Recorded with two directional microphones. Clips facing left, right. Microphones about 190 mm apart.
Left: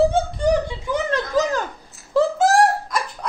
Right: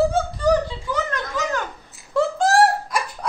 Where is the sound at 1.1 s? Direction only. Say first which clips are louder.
Left 5 dB; 35° left (ahead or behind).